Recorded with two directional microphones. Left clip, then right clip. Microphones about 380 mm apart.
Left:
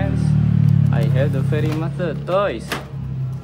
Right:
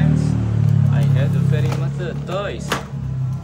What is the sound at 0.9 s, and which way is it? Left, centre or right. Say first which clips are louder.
Speech: left 2 dB; centre.